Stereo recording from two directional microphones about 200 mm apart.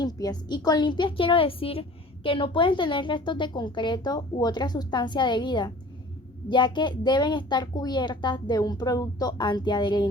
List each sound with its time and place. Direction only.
0.0 s a woman's voice: 20° left (ahead or behind)